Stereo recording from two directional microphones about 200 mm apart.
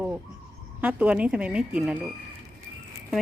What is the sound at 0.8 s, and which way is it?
Speech, 5° right (ahead or behind).